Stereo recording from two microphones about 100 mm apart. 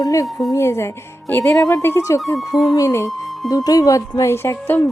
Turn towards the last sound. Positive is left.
turn(degrees=25)  # may be behind; listen again after turning